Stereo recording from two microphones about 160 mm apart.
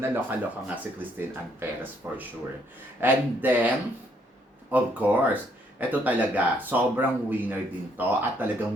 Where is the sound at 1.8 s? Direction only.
10° right (ahead or behind).